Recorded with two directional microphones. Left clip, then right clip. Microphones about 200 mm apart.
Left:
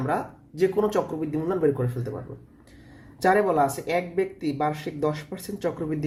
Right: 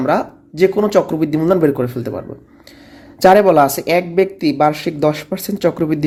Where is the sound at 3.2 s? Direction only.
35° right (ahead or behind).